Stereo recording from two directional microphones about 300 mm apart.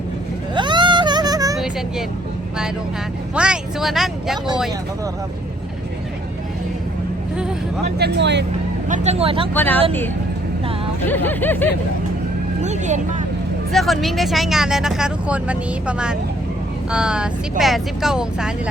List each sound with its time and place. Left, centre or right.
0.5 s vehicle: centre
1.5 s vehicle: centre
3.3 s speech: centre
7.9 s speech: right
8.9 s speech: right
9.6 s speech: centre
11.0 s speech: centre
12.6 s vehicle: right
13.7 s speech: centre